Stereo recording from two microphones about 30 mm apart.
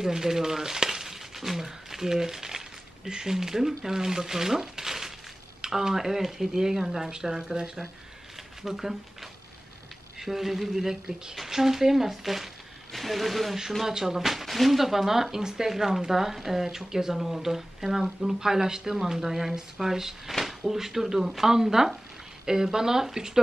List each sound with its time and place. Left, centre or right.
0.0 s speech: centre
7.1 s speech: right
8.6 s speech: centre
13.8 s speech: centre
14.4 s speech: centre